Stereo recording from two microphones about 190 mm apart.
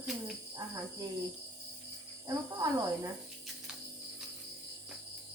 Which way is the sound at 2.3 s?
15° right (ahead or behind).